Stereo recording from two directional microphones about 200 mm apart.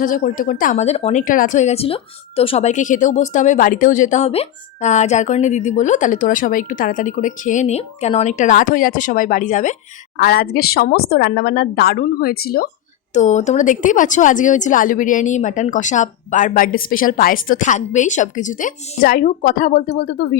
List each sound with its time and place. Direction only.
0.0 s speech: 40° left (ahead or behind)
10.2 s a woman's voice: 50° left (ahead or behind)
13.1 s speech: 35° left (ahead or behind); by 20.3 s 55° left (ahead or behind)